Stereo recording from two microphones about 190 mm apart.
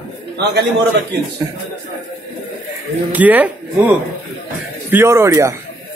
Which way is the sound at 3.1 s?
10° right (ahead or behind).